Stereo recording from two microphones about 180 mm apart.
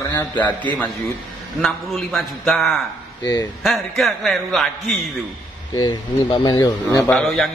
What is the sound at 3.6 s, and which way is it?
A man's voice, centre (ahead or behind).